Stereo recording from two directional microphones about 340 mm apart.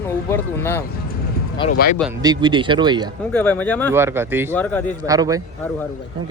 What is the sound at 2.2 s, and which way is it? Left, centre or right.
Speech, centre.